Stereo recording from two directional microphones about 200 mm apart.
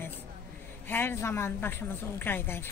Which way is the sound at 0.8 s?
10° left (ahead or behind).